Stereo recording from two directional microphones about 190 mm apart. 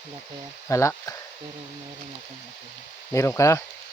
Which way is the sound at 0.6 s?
15° left (ahead or behind).